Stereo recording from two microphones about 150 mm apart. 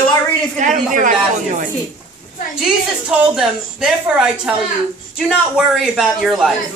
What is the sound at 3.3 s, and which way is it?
A man's voice, 5° right (ahead or behind).